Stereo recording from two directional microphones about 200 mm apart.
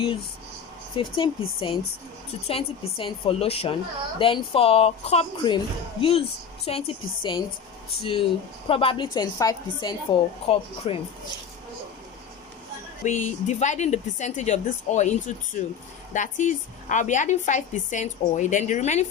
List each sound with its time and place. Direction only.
0.9 s a woman's voice: 25° left (ahead or behind)
13.1 s a woman's voice: 35° left (ahead or behind)